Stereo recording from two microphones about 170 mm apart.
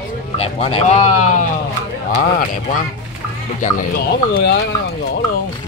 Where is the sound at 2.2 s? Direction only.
55° left (ahead or behind).